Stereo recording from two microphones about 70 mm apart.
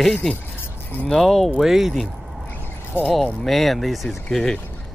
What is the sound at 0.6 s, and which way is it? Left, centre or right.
Keys jangling, left.